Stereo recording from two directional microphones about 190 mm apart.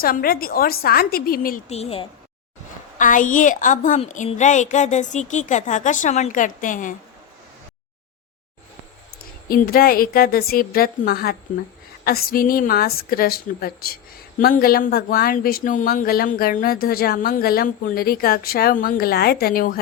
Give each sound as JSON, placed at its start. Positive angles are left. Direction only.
{"t": 0.0, "sound": "a woman's voice", "side_deg": 50}
{"t": 1.7, "sound": "a woman's voice", "side_deg": 30}
{"t": 3.0, "sound": "a woman's voice", "side_deg": 45}
{"t": 9.5, "sound": "a woman's voice", "side_deg": 50}